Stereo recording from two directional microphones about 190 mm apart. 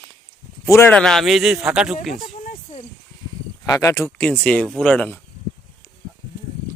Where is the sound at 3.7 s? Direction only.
15° left (ahead or behind).